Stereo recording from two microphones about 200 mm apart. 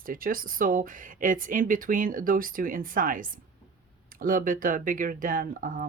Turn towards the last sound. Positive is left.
turn(degrees=-40)  # may be behind; listen again after turning